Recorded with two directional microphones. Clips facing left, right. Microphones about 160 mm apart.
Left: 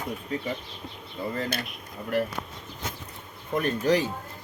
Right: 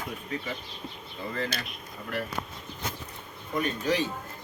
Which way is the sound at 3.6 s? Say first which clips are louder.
Left 4 dB; 45° left (ahead or behind).